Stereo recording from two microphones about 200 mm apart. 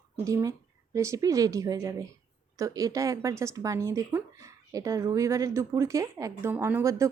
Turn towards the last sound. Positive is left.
turn(degrees=-15)  # may be behind; listen again after turning